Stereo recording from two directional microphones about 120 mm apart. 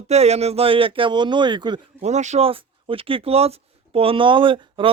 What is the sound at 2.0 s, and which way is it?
Speech, 75° right (ahead or behind).